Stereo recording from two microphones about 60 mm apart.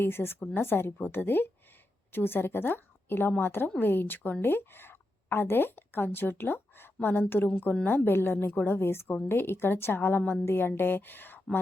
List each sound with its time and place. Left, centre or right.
0.0 s a woman's voice: left